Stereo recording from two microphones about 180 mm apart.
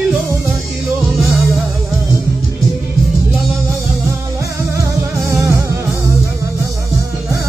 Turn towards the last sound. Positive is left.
turn(degrees=-15)  # may be behind; listen again after turning